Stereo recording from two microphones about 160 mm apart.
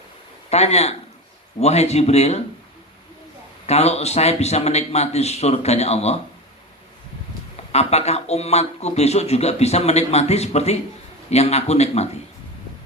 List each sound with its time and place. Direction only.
0.5 s speech: 40° left (ahead or behind)
3.7 s speech: 40° left (ahead or behind)
7.7 s speech: 40° left (ahead or behind)